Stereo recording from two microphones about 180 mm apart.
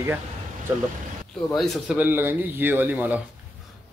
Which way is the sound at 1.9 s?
10° right (ahead or behind).